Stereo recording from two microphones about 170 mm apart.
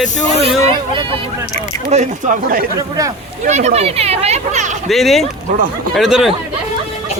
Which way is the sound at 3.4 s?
40° right (ahead or behind).